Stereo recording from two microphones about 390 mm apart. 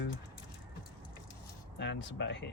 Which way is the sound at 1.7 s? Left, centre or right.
Left.